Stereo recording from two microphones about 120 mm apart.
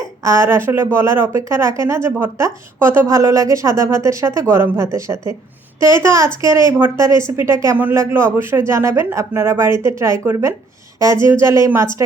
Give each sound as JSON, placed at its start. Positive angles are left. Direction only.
{"t": 0.3, "sound": "a woman's voice", "side_deg": -20}